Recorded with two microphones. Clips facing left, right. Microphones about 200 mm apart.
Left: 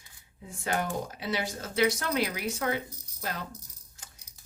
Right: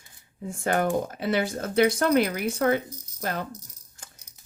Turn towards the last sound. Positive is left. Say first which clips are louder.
# right 6 dB
turn(degrees=-55)  # may be behind; listen again after turning